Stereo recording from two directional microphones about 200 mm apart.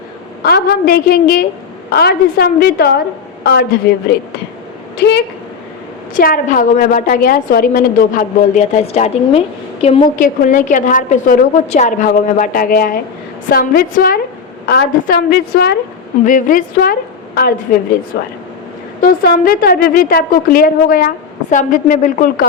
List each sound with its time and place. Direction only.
0.4 s a woman's voice: 50° left (ahead or behind)
4.9 s a woman's voice: 55° left (ahead or behind)
6.1 s a woman's voice: 45° left (ahead or behind)
10.2 s a woman's voice: 40° left (ahead or behind)
16.2 s a woman's voice: 40° left (ahead or behind)
19.0 s a woman's voice: 50° left (ahead or behind)